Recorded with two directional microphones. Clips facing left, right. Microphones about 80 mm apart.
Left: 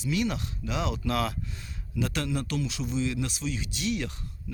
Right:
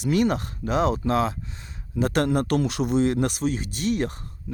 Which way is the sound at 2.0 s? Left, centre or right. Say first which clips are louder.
Right 8 dB; right.